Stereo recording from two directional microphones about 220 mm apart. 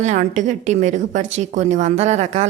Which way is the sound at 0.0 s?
35° right (ahead or behind).